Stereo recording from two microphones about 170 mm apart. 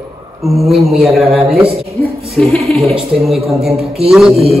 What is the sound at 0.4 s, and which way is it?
A man's voice, centre (ahead or behind).